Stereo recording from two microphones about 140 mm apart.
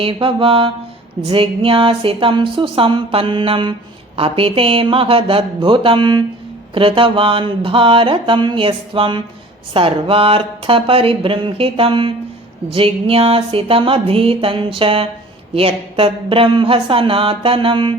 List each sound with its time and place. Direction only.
0.0 s speech: 40° right (ahead or behind)
12.7 s a sound: 45° right (ahead or behind)
15.5 s speech: 40° right (ahead or behind)